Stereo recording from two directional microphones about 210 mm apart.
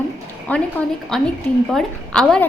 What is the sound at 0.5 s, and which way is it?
A woman's voice, 10° left (ahead or behind).